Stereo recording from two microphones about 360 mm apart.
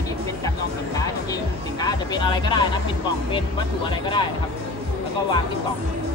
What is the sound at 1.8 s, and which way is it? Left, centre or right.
Speech, centre.